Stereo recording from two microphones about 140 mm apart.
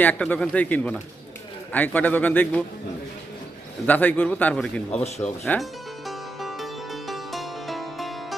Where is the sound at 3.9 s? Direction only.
15° left (ahead or behind).